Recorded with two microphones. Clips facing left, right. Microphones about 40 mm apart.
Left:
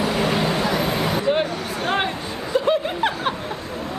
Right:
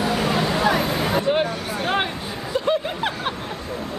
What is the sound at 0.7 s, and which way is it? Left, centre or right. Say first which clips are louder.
Vehicle: right 1 dB; right.